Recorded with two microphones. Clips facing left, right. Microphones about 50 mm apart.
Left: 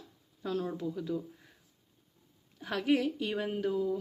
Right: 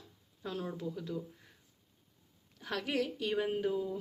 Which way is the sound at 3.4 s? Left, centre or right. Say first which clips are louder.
Even; centre.